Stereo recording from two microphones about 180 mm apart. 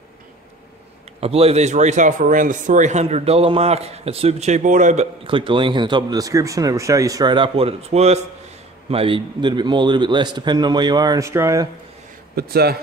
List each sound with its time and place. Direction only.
1.2 s speech: 35° right (ahead or behind)
5.2 s speech: 30° right (ahead or behind)
12.4 s a man's voice: 60° right (ahead or behind)